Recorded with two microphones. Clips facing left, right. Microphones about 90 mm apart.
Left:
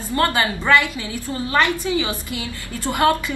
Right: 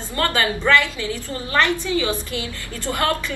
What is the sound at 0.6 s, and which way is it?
A woman's voice, 15° left (ahead or behind).